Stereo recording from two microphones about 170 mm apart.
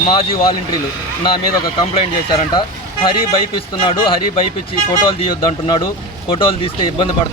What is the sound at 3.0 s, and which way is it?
Speech, 30° left (ahead or behind).